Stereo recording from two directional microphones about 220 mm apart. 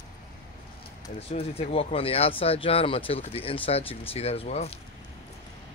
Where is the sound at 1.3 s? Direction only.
25° left (ahead or behind).